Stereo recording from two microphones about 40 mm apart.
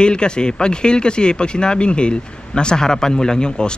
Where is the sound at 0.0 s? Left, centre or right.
Left.